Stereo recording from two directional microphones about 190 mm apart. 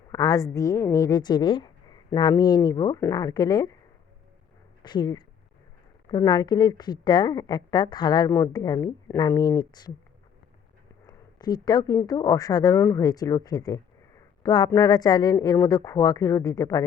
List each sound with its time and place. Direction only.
0.1 s a woman's voice: 15° left (ahead or behind)
4.8 s a woman's voice: 20° left (ahead or behind)
11.0 s a woman's voice: 20° left (ahead or behind)